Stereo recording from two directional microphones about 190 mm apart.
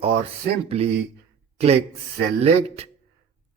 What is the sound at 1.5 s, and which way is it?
Speech, 35° right (ahead or behind).